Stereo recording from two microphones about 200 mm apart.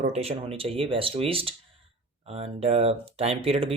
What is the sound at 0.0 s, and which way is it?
Speech, 30° right (ahead or behind).